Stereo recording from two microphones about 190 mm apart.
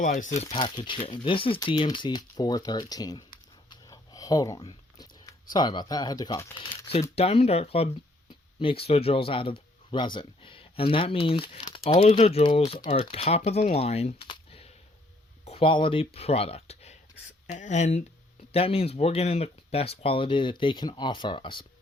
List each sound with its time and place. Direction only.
0.0 s speech: 40° left (ahead or behind)
0.5 s speech: 25° left (ahead or behind)
3.7 s a sound: 20° left (ahead or behind)
7.2 s speech: 30° left (ahead or behind)